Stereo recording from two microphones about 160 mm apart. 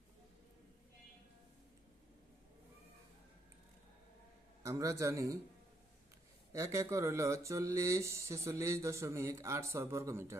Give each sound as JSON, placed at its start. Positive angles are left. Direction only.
{"t": 4.6, "sound": "speech", "side_deg": -20}
{"t": 6.5, "sound": "speech", "side_deg": -20}